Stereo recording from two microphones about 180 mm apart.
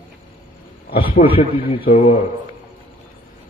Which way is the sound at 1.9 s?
40° left (ahead or behind).